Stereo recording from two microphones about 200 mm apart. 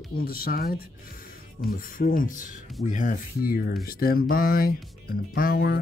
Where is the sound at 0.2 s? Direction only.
50° left (ahead or behind).